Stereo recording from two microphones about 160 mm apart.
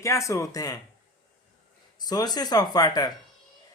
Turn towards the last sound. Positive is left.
turn(degrees=25)  # may be behind; listen again after turning